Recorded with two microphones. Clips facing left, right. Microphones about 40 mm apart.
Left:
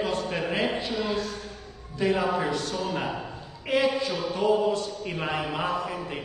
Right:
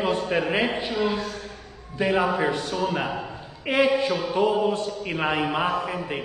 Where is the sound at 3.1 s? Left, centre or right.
Right.